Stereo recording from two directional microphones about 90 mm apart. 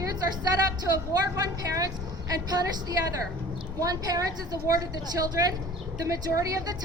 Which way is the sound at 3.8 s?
40° right (ahead or behind).